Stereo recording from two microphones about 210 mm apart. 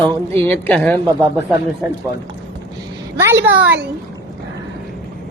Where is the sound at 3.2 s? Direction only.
10° right (ahead or behind).